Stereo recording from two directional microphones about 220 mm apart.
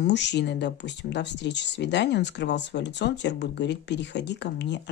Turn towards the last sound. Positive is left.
turn(degrees=50)  # may be behind; listen again after turning